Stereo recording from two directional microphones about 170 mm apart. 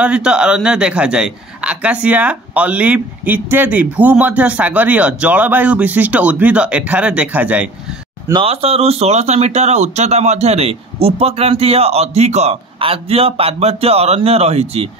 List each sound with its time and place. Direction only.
0.0 s a man's voice: 5° right (ahead or behind)
8.3 s speech: 30° right (ahead or behind)